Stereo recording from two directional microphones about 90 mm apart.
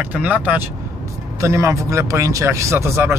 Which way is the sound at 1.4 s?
30° right (ahead or behind).